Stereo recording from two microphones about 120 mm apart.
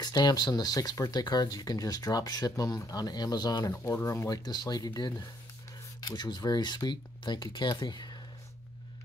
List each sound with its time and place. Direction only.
0.0 s speech: 35° left (ahead or behind)
3.7 s speech: 25° left (ahead or behind)